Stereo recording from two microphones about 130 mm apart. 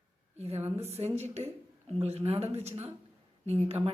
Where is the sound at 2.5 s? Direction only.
55° right (ahead or behind).